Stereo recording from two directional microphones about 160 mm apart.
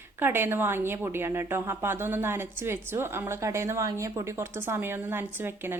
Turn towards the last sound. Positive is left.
turn(degrees=-15)  # may be behind; listen again after turning